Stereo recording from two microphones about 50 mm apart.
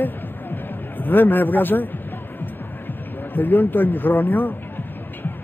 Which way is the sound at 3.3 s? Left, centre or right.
Left.